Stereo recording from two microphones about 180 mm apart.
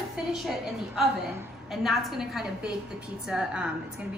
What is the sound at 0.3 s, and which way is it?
A woman's voice, centre (ahead or behind).